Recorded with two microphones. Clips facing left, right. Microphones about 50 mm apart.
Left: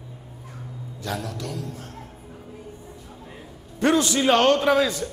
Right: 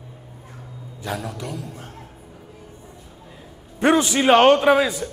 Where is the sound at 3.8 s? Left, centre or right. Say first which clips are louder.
Right 3 dB; right.